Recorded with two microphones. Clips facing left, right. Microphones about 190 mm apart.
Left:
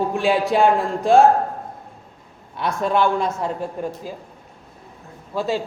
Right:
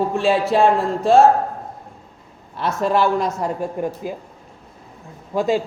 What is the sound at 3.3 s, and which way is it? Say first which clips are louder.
Speech: right 2 dB; 10° right (ahead or behind).